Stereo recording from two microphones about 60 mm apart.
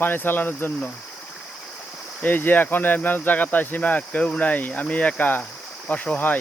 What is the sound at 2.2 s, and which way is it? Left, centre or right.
Speech, left.